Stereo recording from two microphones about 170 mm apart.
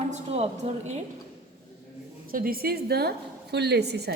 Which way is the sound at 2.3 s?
60° right (ahead or behind).